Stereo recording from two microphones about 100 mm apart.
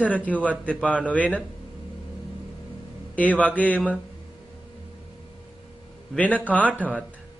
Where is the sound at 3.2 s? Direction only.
15° left (ahead or behind).